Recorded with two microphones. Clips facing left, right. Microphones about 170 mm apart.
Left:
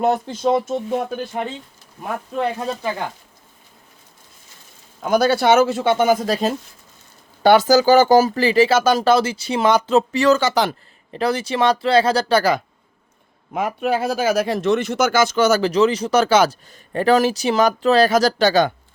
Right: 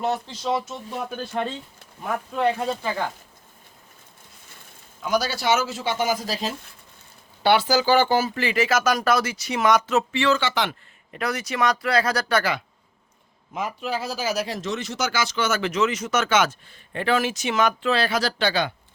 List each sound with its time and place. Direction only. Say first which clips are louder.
0.0 s speech: left 7 dB; 50° left (ahead or behind)
1.2 s speech: left 2 dB; 20° left (ahead or behind)
5.0 s speech: left 7 dB; 55° left (ahead or behind); by 12.6 s 40° left (ahead or behind)
13.5 s speech: left 7 dB; 60° left (ahead or behind); by 18.7 s 45° left (ahead or behind)